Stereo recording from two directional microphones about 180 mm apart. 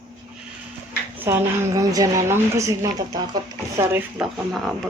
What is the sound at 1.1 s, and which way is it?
A woman's voice, 10° right (ahead or behind).